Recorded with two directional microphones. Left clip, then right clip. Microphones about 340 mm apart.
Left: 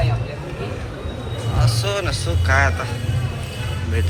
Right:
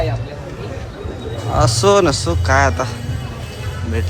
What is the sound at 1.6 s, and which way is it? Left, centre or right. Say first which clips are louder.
Speech: right 11 dB; centre.